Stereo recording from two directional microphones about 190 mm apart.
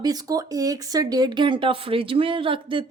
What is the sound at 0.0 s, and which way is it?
Speech, 20° right (ahead or behind).